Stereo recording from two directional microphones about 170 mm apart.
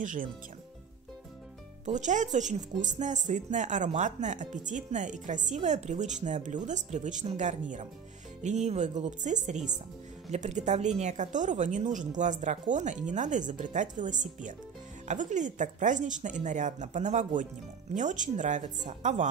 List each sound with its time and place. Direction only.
0.0 s speech: 50° right (ahead or behind)
1.9 s speech: 45° right (ahead or behind)